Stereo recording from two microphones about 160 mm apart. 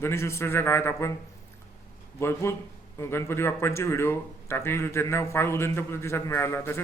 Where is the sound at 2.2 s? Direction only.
15° left (ahead or behind).